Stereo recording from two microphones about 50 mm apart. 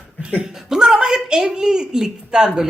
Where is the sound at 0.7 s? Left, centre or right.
Centre.